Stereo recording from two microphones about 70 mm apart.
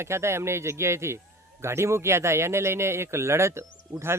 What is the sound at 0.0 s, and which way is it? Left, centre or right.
A man's voice, right.